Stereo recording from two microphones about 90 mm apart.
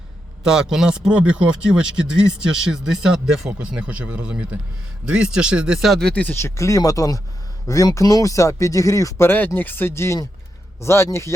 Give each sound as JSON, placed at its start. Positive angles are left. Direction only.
{"t": 0.4, "sound": "speech", "side_deg": -5}
{"t": 6.3, "sound": "speech", "side_deg": 35}
{"t": 9.2, "sound": "speech", "side_deg": 25}